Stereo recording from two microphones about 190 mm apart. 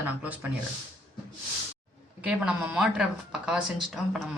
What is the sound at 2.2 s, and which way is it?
Speech, 5° right (ahead or behind).